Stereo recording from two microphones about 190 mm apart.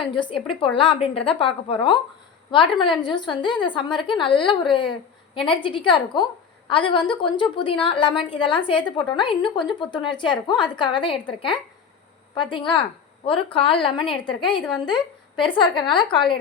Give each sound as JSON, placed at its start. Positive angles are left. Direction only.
{"t": 0.0, "sound": "a woman's voice", "side_deg": 25}
{"t": 5.5, "sound": "a woman's voice", "side_deg": 25}
{"t": 12.3, "sound": "a woman's voice", "side_deg": 25}